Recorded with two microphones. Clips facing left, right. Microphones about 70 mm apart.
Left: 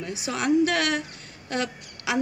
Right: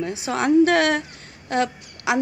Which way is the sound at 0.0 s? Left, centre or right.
Right.